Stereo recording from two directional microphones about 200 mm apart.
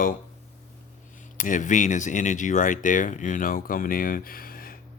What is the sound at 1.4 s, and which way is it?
Speech, 40° left (ahead or behind).